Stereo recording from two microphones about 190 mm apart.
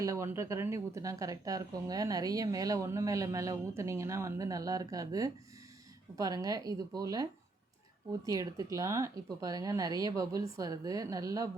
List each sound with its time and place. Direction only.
0.0 s a woman's voice: 15° right (ahead or behind)
8.3 s a woman's voice: 15° right (ahead or behind)